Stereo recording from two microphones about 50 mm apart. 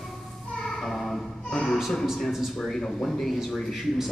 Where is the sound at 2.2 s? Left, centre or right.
Centre.